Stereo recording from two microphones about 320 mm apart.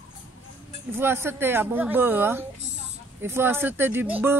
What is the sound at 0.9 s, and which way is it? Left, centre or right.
Speech, centre.